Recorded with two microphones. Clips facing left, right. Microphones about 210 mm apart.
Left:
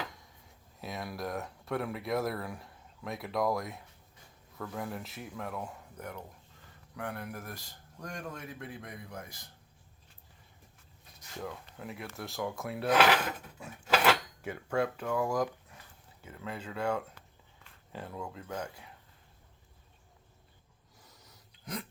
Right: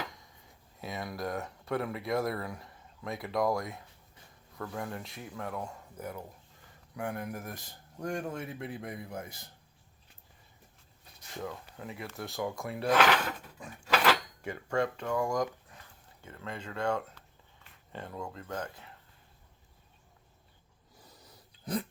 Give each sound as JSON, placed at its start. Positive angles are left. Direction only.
{"t": 0.1, "sound": "speech", "side_deg": 0}
{"t": 11.3, "sound": "speech", "side_deg": 0}
{"t": 13.6, "sound": "cutlery", "side_deg": 5}
{"t": 16.2, "sound": "speech", "side_deg": 5}
{"t": 21.6, "sound": "a sound", "side_deg": -30}